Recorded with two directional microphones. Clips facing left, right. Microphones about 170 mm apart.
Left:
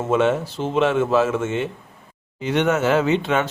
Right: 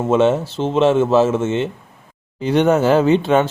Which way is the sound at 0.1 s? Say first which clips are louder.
Right 4 dB; 25° right (ahead or behind).